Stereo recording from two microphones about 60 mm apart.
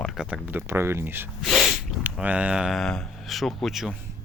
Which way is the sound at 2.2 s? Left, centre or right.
Right.